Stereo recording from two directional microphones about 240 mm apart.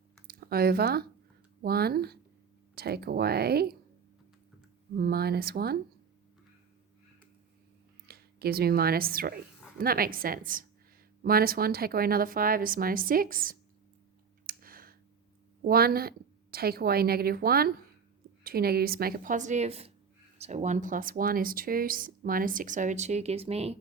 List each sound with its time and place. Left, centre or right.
0.3 s speech: right
4.9 s speech: right
8.0 s speech: right
14.4 s clicking: right
15.6 s speech: right